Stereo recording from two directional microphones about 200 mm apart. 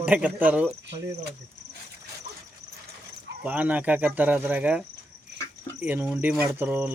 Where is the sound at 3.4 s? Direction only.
5° right (ahead or behind).